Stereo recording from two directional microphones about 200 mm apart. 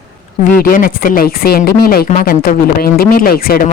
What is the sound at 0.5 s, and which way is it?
Speech, 45° left (ahead or behind).